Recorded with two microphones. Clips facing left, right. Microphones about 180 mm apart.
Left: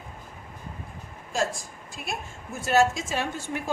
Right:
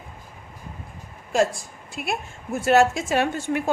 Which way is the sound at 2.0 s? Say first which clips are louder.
Right 6 dB; 65° right (ahead or behind).